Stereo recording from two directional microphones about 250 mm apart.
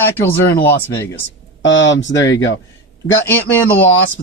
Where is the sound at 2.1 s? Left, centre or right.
Centre.